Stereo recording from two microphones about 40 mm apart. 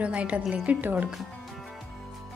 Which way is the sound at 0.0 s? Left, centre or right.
Right.